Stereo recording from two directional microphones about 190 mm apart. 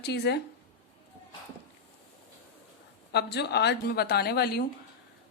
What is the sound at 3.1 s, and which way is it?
A woman's voice, 60° left (ahead or behind).